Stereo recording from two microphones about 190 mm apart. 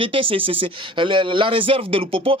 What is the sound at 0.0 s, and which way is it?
Speech, 30° right (ahead or behind).